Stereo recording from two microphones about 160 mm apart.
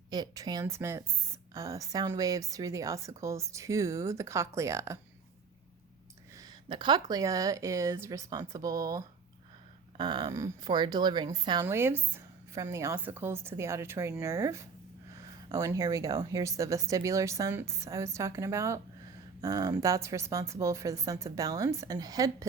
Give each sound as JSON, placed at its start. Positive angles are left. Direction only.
{"t": 0.1, "sound": "a woman's voice", "side_deg": -25}
{"t": 6.3, "sound": "a woman's voice", "side_deg": -25}
{"t": 11.6, "sound": "a woman's voice", "side_deg": -15}